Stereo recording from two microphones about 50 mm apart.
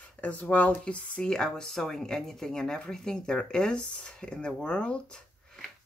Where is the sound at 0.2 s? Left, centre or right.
Left.